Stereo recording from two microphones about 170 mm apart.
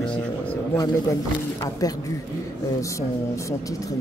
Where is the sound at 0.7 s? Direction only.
20° left (ahead or behind).